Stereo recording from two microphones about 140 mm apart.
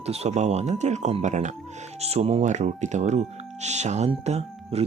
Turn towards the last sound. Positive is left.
turn(degrees=-50)  # may be behind; listen again after turning